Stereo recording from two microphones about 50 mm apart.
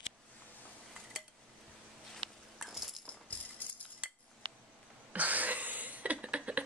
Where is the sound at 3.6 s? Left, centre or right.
Left.